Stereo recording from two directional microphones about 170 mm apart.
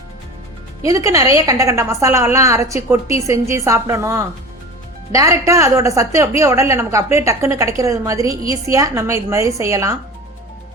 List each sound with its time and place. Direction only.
0.9 s a woman's voice: 20° right (ahead or behind)